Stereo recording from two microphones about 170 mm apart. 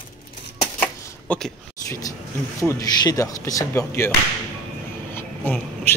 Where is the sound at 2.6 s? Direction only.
20° left (ahead or behind).